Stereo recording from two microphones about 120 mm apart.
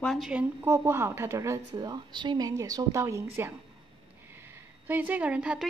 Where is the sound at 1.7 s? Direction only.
35° right (ahead or behind).